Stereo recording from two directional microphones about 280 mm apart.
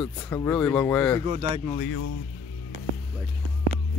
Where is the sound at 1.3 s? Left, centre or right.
Right.